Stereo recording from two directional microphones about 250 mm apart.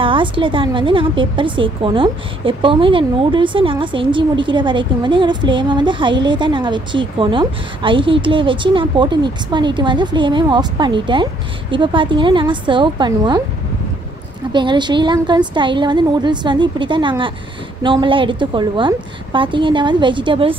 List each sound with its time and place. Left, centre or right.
0.0 s a woman's voice: centre
14.5 s a woman's voice: centre